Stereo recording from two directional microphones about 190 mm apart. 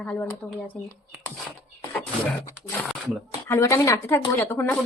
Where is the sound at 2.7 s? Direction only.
5° left (ahead or behind).